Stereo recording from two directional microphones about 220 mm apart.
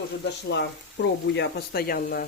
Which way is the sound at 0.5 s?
50° left (ahead or behind).